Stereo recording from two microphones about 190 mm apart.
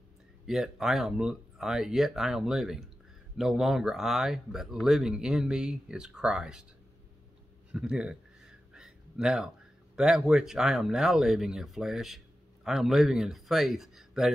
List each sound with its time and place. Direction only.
0.5 s speech: centre (ahead or behind)
7.7 s a sound: 5° right (ahead or behind)
9.9 s speech: 5° right (ahead or behind)